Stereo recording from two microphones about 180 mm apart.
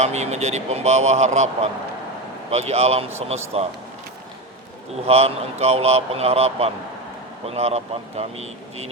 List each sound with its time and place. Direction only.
0.0 s a man's voice: 40° right (ahead or behind)
2.5 s a man's voice: 35° right (ahead or behind)
5.0 s a man's voice: 35° right (ahead or behind)